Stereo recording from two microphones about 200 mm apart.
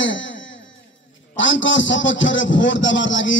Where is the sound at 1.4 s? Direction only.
70° left (ahead or behind).